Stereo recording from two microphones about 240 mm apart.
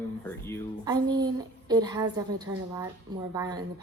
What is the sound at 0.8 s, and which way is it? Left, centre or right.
A child's voice, centre.